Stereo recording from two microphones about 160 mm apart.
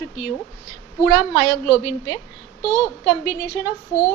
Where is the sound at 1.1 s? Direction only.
15° left (ahead or behind).